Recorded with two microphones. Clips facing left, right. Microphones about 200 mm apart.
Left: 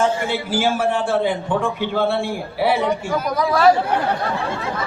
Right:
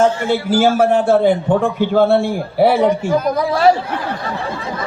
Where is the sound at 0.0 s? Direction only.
45° right (ahead or behind).